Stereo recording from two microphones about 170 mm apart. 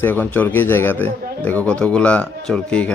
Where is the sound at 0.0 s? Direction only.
10° left (ahead or behind).